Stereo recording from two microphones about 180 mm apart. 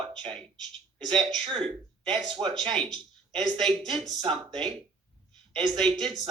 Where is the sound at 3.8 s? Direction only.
25° right (ahead or behind).